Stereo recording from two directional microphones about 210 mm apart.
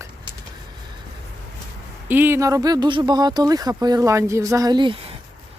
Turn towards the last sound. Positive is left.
turn(degrees=-25)  # may be behind; listen again after turning